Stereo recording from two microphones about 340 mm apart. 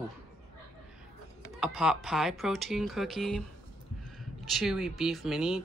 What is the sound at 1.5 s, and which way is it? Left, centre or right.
Speech, centre.